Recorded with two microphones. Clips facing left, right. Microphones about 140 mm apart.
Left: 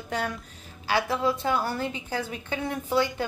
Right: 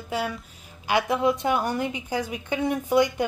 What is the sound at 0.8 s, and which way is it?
A woman's voice, 20° right (ahead or behind).